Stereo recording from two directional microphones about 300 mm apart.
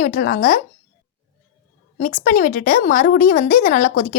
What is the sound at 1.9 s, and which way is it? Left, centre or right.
Speech, left.